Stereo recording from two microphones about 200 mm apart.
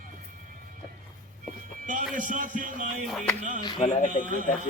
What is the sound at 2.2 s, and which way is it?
Speech, 40° right (ahead or behind).